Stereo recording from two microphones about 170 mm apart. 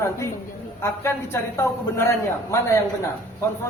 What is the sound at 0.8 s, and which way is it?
A man's voice, 15° left (ahead or behind).